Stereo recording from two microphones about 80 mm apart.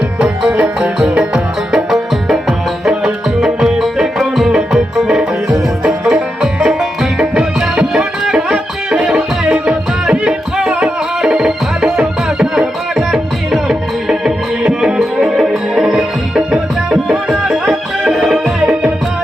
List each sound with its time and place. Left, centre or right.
0.2 s music: centre
18.6 s music: centre